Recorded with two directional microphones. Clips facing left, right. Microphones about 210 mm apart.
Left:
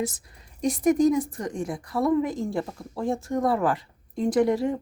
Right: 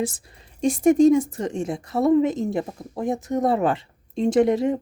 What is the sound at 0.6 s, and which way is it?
Speech, 25° right (ahead or behind).